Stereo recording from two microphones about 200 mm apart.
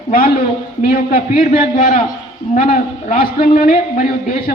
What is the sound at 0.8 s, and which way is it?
A woman's voice, 45° left (ahead or behind).